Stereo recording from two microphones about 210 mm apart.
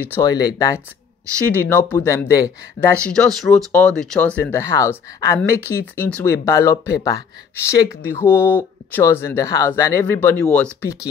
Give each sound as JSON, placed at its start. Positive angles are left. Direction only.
{"t": 0.0, "sound": "speech", "side_deg": 15}
{"t": 3.1, "sound": "speech", "side_deg": 5}